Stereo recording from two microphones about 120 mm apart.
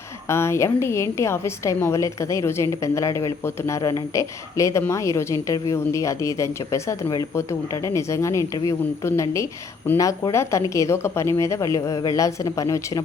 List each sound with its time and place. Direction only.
0.3 s a woman's voice: 20° left (ahead or behind)